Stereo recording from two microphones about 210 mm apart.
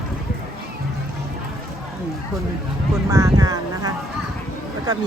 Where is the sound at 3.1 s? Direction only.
15° right (ahead or behind).